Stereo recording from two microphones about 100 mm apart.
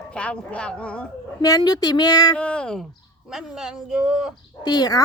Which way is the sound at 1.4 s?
40° left (ahead or behind).